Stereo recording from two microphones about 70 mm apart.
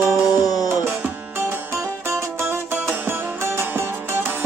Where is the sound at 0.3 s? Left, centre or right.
Left.